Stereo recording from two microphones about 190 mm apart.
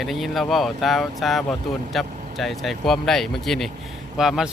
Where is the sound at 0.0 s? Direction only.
Centre (ahead or behind).